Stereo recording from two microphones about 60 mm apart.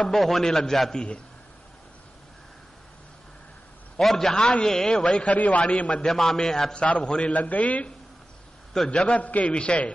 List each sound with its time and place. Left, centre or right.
0.1 s a man's voice: centre
4.0 s a man's voice: centre
6.0 s a man's voice: centre; by 7.9 s left
8.7 s a man's voice: centre